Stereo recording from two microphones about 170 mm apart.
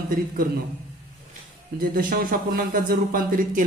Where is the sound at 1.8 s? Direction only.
60° right (ahead or behind).